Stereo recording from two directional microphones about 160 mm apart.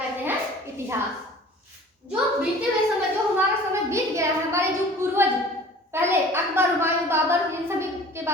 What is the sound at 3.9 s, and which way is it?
A child's voice, 15° right (ahead or behind).